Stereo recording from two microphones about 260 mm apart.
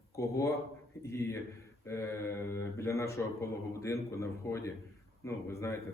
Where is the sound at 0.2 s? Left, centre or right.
Centre.